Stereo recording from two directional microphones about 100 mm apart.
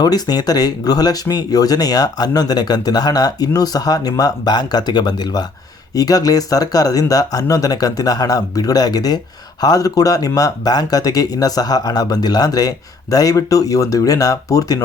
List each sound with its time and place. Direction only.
0.0 s speech: 40° left (ahead or behind)